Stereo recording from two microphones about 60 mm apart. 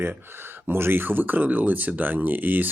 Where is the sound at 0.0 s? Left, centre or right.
Right.